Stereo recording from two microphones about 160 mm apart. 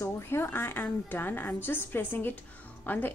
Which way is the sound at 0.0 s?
15° left (ahead or behind).